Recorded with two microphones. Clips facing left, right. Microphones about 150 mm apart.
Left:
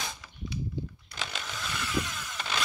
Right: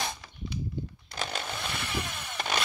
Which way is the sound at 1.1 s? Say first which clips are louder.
Right 5 dB; 40° right (ahead or behind).